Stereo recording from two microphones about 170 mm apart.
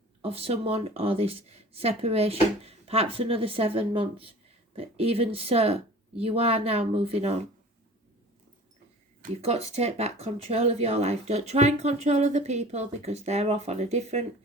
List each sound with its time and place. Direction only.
0.2 s speech: 35° right (ahead or behind)
9.3 s speech: 40° right (ahead or behind)